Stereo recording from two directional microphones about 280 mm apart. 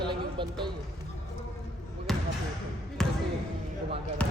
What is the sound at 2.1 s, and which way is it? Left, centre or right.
Basketball bounce, centre.